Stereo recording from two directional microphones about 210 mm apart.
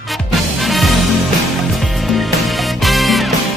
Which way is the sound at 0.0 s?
Centre (ahead or behind).